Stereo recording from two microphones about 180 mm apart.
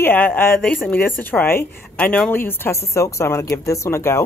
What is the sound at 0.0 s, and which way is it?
Speech, 10° left (ahead or behind).